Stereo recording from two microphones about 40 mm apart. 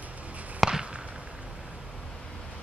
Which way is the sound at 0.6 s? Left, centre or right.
Centre.